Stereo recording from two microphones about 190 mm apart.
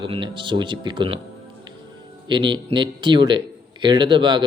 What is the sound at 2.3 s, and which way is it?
Speech, 25° right (ahead or behind).